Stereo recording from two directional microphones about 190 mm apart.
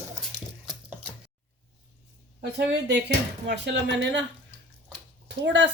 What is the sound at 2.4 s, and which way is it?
Speech, 60° right (ahead or behind).